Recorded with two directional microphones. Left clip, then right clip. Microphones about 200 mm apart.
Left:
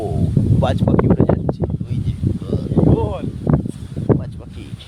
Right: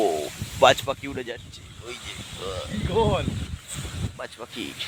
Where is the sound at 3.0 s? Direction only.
35° right (ahead or behind).